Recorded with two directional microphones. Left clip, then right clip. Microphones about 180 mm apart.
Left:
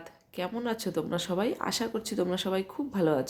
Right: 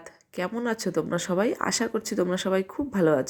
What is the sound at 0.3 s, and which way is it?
Speech, 20° right (ahead or behind).